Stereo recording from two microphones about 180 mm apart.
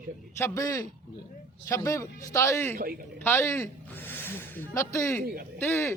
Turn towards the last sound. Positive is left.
turn(degrees=10)  # may be behind; listen again after turning